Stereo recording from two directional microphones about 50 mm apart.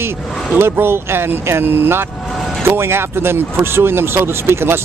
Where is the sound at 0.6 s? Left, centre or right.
Right.